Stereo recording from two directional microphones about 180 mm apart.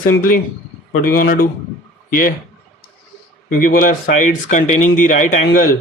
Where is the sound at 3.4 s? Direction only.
50° left (ahead or behind).